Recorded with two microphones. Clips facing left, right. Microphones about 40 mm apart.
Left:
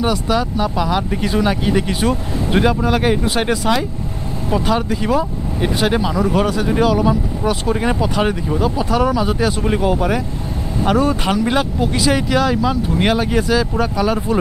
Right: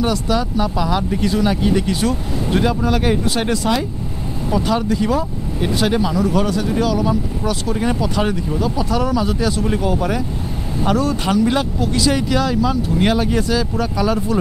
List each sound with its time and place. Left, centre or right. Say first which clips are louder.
0.0 s speech: left 1 dB; centre